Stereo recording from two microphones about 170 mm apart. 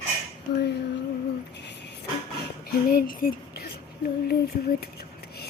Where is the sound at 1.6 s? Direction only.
90° left.